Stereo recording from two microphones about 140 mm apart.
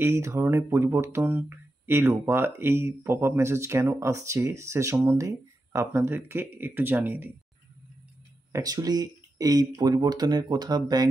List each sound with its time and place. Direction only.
0.0 s speech: 20° right (ahead or behind)
8.5 s speech: 25° right (ahead or behind)